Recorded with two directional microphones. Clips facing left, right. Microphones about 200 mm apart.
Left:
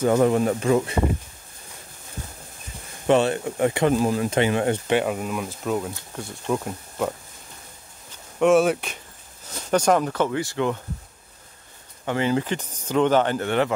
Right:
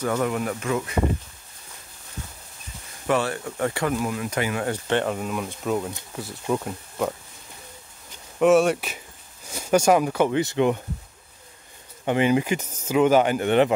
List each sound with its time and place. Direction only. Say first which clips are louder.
0.0 s speech: left 6 dB; 30° left (ahead or behind)
3.1 s speech: left 5 dB; 25° left (ahead or behind)
4.8 s speech: left 2 dB; 10° left (ahead or behind)
8.4 s speech: even; centre (ahead or behind); by 10.8 s 20° right (ahead or behind)
12.0 s speech: right 2 dB; 15° right (ahead or behind)